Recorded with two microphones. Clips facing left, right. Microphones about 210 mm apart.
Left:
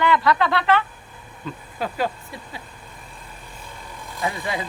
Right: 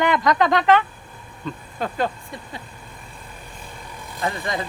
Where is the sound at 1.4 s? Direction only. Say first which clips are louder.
Right 1 dB; 5° left (ahead or behind).